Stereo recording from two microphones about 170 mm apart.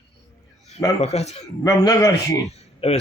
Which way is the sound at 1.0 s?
40° left (ahead or behind).